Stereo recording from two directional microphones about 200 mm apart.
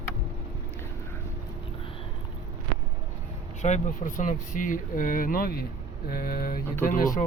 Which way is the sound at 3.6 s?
40° left (ahead or behind).